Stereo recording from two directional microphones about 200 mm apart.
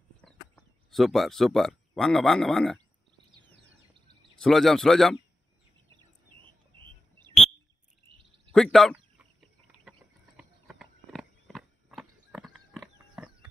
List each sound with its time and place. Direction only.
0.2 s speech: centre (ahead or behind)
4.4 s speech: centre (ahead or behind)
6.8 s bird: 20° right (ahead or behind)
8.5 s speech: centre (ahead or behind)
8.9 s chicken: 5° right (ahead or behind)